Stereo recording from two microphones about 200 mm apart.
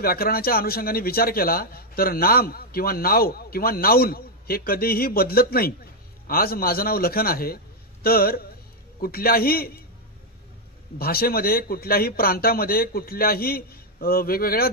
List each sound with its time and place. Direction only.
0.0 s a man's voice: 50° left (ahead or behind)
11.0 s a man's voice: 50° left (ahead or behind)